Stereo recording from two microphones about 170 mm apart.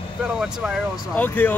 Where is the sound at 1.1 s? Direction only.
10° left (ahead or behind).